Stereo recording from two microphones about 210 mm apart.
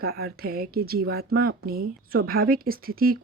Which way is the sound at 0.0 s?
50° right (ahead or behind).